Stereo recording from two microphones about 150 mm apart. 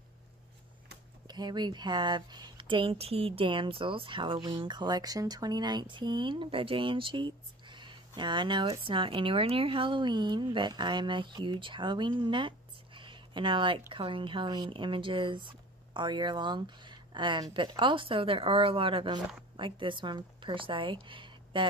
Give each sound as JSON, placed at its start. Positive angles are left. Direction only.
{"t": 1.2, "sound": "speech", "side_deg": -30}